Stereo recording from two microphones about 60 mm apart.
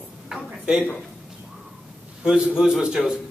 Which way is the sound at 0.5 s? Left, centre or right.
Centre.